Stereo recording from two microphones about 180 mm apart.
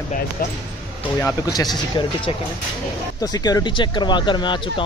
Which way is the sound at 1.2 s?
20° left (ahead or behind).